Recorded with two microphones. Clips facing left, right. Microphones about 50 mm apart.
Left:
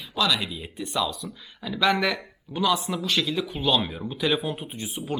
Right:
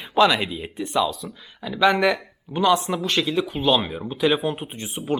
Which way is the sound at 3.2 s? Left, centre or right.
Centre.